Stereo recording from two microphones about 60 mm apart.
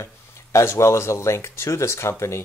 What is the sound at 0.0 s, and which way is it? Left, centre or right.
Speech, left.